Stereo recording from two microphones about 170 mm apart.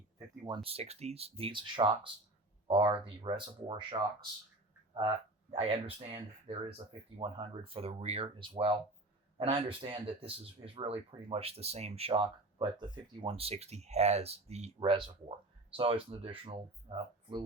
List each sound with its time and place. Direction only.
0.4 s speech: 30° right (ahead or behind)
4.9 s speech: 25° right (ahead or behind)